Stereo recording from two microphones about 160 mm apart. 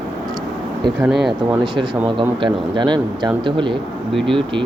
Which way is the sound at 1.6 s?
30° right (ahead or behind).